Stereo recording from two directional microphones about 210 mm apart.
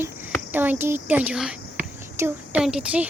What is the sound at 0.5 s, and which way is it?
Speech, 10° right (ahead or behind).